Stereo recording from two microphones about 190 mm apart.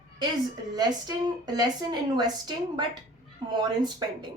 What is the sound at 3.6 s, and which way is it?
Speech, 20° right (ahead or behind).